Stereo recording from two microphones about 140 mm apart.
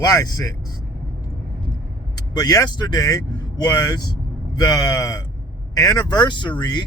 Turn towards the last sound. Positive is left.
turn(degrees=30)  # may be behind; listen again after turning